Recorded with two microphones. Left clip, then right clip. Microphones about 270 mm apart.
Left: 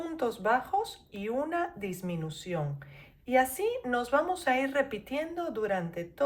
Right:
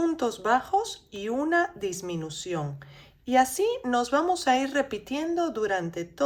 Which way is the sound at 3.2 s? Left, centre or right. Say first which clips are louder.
Right 4 dB; centre.